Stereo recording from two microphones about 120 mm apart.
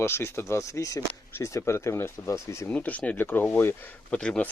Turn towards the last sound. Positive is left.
turn(degrees=10)  # may be behind; listen again after turning